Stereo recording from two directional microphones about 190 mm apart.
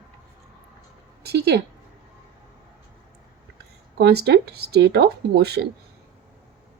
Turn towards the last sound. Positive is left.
turn(degrees=-60)  # may be behind; listen again after turning